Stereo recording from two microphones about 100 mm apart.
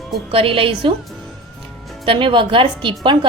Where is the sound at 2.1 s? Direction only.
60° right (ahead or behind).